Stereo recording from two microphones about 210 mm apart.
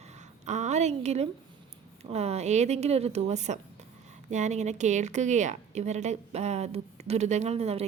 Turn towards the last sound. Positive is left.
turn(degrees=-30)  # may be behind; listen again after turning